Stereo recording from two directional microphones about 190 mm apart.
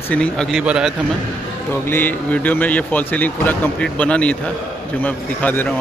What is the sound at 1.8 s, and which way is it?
Speech, 10° left (ahead or behind).